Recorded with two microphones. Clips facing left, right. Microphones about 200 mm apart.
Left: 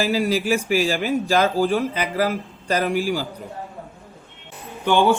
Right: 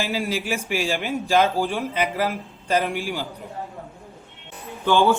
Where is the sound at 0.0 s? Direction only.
40° left (ahead or behind).